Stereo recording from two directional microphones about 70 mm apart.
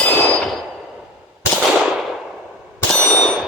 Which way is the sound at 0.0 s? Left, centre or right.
Left.